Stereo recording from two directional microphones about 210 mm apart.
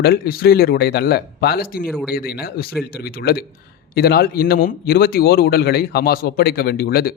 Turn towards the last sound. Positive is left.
turn(degrees=45)  # may be behind; listen again after turning